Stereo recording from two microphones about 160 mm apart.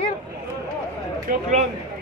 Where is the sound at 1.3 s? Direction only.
60° right (ahead or behind).